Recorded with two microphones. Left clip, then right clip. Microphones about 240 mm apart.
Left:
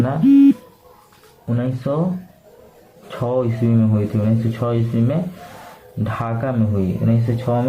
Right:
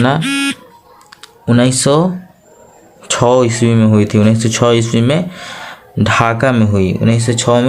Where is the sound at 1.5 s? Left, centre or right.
Right.